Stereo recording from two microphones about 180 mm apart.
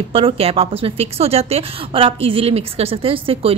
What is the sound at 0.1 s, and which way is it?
A woman's voice, 30° right (ahead or behind).